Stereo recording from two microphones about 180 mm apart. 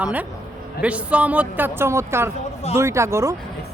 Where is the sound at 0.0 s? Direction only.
10° right (ahead or behind).